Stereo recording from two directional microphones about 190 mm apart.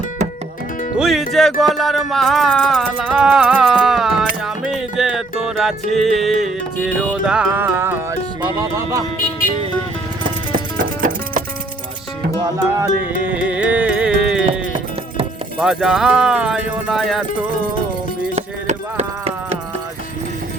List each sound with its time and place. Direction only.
0.9 s music: centre (ahead or behind); by 9.0 s 15° right (ahead or behind)
12.4 s music: 20° right (ahead or behind)
13.2 s music: 5° right (ahead or behind)
18.3 s a sound: 35° right (ahead or behind)